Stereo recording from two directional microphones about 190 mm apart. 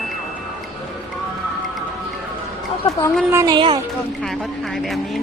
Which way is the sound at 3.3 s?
15° right (ahead or behind).